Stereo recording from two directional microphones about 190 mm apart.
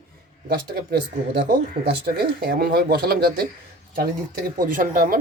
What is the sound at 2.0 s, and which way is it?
Speech, 55° right (ahead or behind).